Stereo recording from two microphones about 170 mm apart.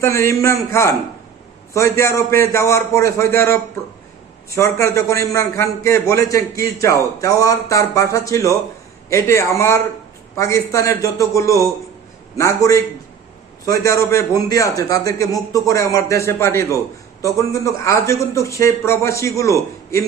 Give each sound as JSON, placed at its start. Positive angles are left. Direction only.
{"t": 0.0, "sound": "a man's voice", "side_deg": 15}
{"t": 13.8, "sound": "a man's voice", "side_deg": 15}